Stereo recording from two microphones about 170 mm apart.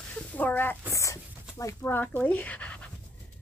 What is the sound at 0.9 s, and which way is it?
Speech, 15° left (ahead or behind).